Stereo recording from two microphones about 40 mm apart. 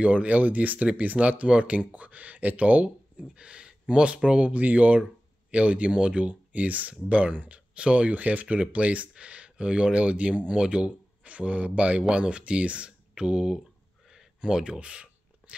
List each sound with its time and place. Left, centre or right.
0.0 s speech: right
3.3 s speech: right
14.1 s a sound: centre